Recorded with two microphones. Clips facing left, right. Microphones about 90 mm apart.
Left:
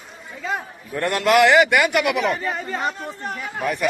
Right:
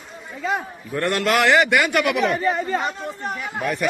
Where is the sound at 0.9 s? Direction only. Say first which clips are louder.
Left 3 dB; 15° left (ahead or behind); by 3.7 s centre (ahead or behind).